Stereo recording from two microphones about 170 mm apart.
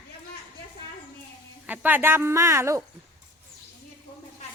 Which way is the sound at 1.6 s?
10° right (ahead or behind).